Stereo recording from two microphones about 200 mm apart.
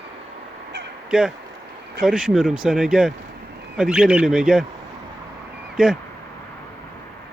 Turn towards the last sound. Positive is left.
turn(degrees=0)  # may be behind; listen again after turning